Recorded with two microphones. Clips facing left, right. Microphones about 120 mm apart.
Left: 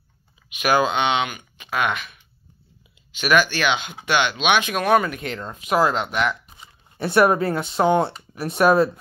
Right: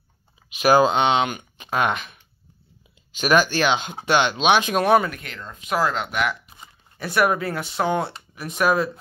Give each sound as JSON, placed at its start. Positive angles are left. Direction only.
{"t": 0.5, "sound": "speech", "side_deg": -35}
{"t": 3.2, "sound": "speech", "side_deg": -35}
{"t": 5.2, "sound": "speech", "side_deg": 25}
{"t": 5.9, "sound": "speech", "side_deg": -5}
{"t": 7.0, "sound": "speech", "side_deg": 30}